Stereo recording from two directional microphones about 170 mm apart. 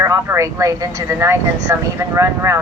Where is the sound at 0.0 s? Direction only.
15° right (ahead or behind).